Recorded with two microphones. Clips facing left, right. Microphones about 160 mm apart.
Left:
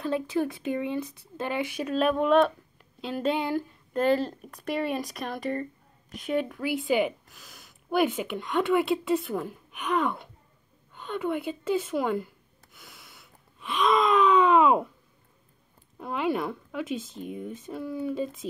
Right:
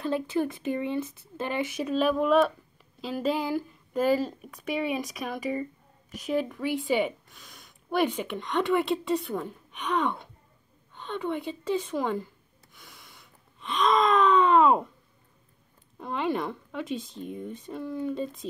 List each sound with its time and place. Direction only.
0.0 s a woman's voice: centre (ahead or behind)
12.7 s gasp: centre (ahead or behind)
16.0 s a woman's voice: 5° left (ahead or behind)